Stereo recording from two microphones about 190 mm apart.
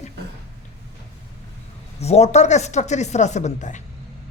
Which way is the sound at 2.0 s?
35° left (ahead or behind).